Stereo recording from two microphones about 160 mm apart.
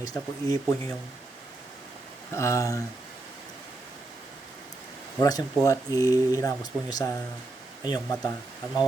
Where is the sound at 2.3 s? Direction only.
15° left (ahead or behind).